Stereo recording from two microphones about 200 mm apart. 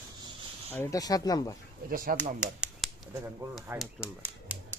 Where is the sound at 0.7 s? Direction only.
15° left (ahead or behind).